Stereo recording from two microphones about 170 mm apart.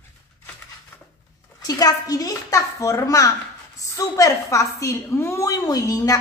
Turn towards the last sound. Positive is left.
turn(degrees=20)  # may be behind; listen again after turning